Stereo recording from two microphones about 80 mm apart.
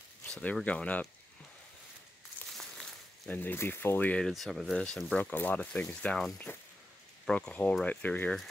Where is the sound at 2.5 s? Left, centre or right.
Centre.